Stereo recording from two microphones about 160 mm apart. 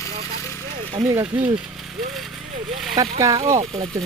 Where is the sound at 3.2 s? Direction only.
20° right (ahead or behind).